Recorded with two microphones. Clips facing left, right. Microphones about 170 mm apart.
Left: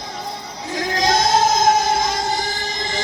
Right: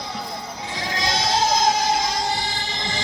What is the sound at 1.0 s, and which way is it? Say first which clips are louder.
Music: left 6 dB; 45° left (ahead or behind).